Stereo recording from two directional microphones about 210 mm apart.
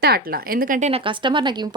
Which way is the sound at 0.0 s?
45° right (ahead or behind).